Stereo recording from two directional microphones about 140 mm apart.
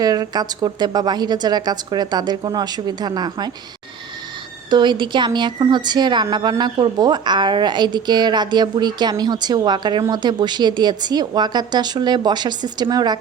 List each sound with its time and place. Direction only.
0.0 s a woman's voice: 25° right (ahead or behind)
4.7 s a woman's voice: 35° right (ahead or behind)